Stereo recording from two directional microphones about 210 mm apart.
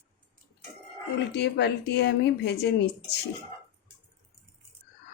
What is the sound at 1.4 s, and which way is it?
A woman's voice, 50° left (ahead or behind).